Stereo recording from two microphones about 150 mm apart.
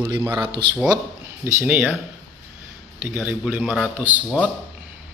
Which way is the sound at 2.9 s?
10° right (ahead or behind).